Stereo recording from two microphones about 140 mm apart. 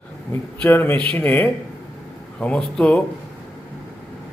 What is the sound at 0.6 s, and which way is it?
A man's voice, 15° left (ahead or behind).